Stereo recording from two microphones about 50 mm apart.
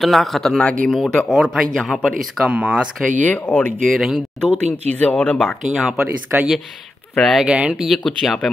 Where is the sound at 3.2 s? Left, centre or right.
Left.